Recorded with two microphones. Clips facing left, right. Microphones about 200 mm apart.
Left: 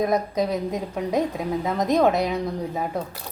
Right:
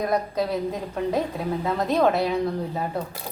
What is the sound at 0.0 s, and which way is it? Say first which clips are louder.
A woman's voice: left 2 dB; 20° left (ahead or behind).